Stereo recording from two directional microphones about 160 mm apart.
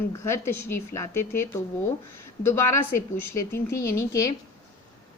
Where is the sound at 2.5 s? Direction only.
15° left (ahead or behind).